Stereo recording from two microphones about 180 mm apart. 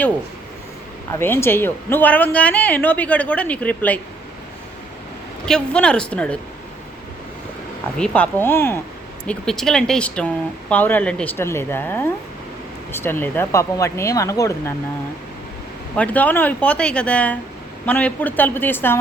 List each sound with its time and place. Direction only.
1.2 s speech: 15° left (ahead or behind)
5.5 s speech: 5° left (ahead or behind)
7.9 s speech: 5° left (ahead or behind)
16.0 s speech: 10° left (ahead or behind)